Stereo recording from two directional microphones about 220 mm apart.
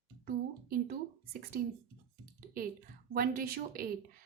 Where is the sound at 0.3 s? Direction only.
40° right (ahead or behind).